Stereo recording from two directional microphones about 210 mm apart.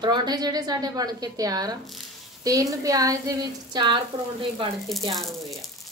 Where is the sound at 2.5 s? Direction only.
15° right (ahead or behind).